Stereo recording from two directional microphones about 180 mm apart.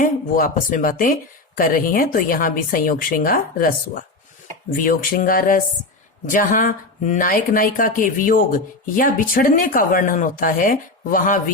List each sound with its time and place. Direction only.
0.0 s speech: 50° left (ahead or behind)